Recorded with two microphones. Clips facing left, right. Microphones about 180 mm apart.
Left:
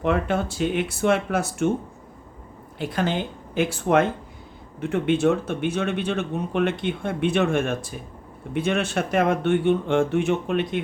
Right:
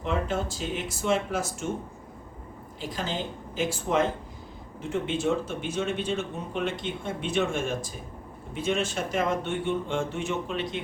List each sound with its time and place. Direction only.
0.0 s speech: 60° left (ahead or behind)
2.7 s speech: 60° left (ahead or behind)